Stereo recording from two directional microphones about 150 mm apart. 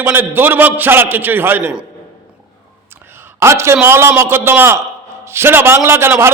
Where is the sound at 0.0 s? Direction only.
15° right (ahead or behind).